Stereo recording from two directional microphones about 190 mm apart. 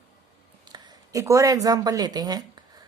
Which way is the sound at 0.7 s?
20° right (ahead or behind).